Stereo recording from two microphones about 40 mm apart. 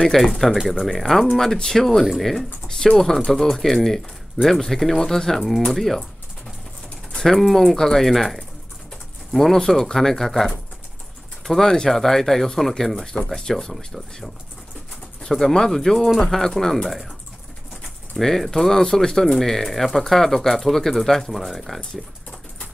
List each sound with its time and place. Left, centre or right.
0.1 s speech: centre
7.2 s speech: centre
18.1 s speech: centre